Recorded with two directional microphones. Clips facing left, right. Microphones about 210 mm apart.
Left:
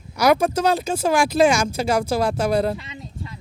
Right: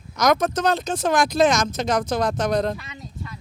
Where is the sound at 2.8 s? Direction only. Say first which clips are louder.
Left 1 dB; 25° left (ahead or behind).